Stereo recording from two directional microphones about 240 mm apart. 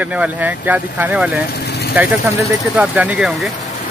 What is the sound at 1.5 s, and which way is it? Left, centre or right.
Vehicle, left.